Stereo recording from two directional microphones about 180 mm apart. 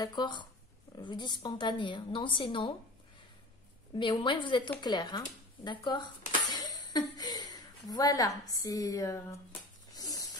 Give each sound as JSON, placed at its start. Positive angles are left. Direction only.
{"t": 0.0, "sound": "speech", "side_deg": 25}
{"t": 3.9, "sound": "a woman's voice", "side_deg": 25}
{"t": 9.9, "sound": "a sound", "side_deg": 20}